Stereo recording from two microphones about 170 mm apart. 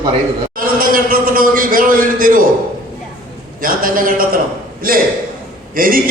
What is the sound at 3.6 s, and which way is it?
A man's voice, 55° right (ahead or behind).